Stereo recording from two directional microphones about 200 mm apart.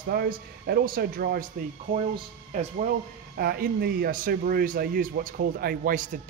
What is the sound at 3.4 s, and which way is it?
Speech, 50° right (ahead or behind).